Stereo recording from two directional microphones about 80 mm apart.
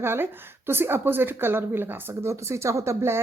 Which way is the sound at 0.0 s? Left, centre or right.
Right.